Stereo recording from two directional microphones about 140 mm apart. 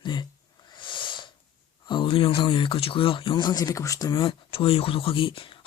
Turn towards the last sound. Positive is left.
turn(degrees=40)  # may be behind; listen again after turning